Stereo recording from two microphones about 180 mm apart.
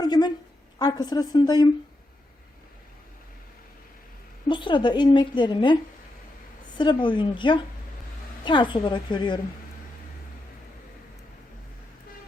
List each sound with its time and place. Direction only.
0.0 s a sound: 25° left (ahead or behind)
0.8 s a woman's voice: 20° left (ahead or behind)
4.4 s a woman's voice: 25° left (ahead or behind)
6.7 s a woman's voice: 25° left (ahead or behind)